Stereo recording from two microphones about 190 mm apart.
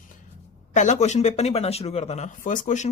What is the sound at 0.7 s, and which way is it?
Speech, 35° left (ahead or behind).